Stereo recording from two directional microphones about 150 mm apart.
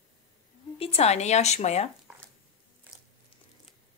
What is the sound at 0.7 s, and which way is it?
A woman's voice, 40° left (ahead or behind).